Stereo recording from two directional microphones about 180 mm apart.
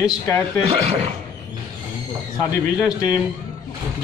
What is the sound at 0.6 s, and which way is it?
Speech, 35° right (ahead or behind).